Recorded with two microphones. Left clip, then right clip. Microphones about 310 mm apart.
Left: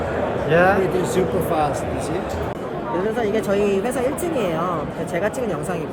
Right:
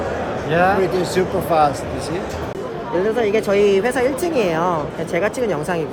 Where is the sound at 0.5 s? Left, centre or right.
Centre.